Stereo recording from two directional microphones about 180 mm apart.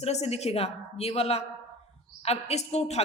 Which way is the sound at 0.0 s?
35° left (ahead or behind).